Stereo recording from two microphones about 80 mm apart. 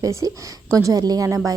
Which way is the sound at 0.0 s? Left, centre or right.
Right.